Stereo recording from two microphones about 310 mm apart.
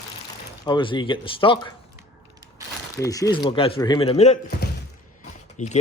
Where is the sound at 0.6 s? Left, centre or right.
Centre.